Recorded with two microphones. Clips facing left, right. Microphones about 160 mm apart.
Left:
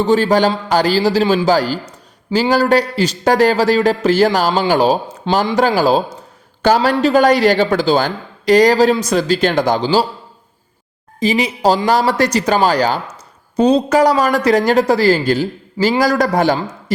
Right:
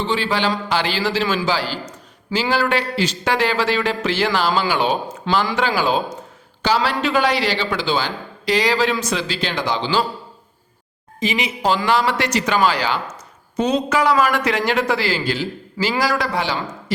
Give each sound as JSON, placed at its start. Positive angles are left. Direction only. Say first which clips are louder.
{"t": 0.0, "sound": "a man's voice", "louder": "left 8 dB", "side_deg": 45}
{"t": 11.2, "sound": "speech", "louder": "left 6 dB", "side_deg": 35}